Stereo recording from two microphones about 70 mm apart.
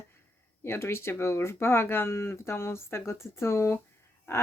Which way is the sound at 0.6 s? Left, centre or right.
Left.